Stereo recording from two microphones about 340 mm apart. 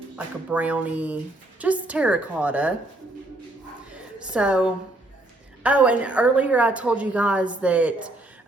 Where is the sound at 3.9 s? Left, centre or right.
Centre.